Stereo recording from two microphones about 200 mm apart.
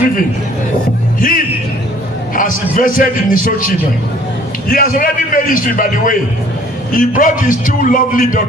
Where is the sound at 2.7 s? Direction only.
45° left (ahead or behind).